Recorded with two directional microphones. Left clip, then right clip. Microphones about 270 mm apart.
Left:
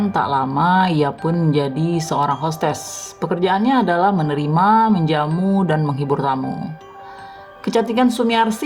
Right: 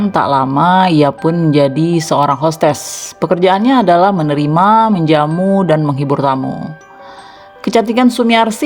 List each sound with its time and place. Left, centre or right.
0.0 s speech: right
7.6 s speech: right